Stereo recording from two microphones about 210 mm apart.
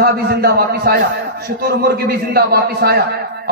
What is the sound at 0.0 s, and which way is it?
A man's voice, 50° right (ahead or behind).